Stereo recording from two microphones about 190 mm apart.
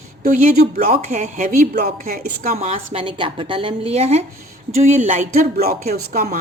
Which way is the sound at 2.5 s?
30° right (ahead or behind).